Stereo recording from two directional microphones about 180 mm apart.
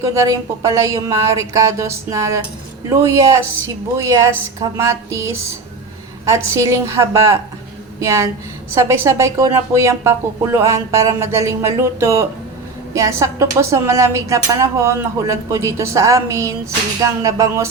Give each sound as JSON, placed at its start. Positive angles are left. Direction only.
{"t": 0.0, "sound": "a woman's voice", "side_deg": -15}